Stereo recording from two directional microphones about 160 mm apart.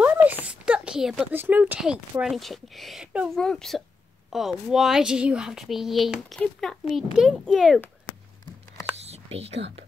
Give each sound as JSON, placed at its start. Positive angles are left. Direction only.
{"t": 0.0, "sound": "a sound", "side_deg": -10}
{"t": 0.5, "sound": "speech", "side_deg": -5}
{"t": 9.0, "sound": "whispering", "side_deg": -40}